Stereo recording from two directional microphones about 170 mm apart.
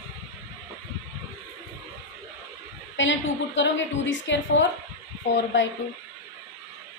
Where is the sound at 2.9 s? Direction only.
90° left.